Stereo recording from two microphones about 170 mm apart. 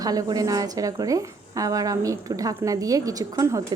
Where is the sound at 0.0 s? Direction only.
20° right (ahead or behind).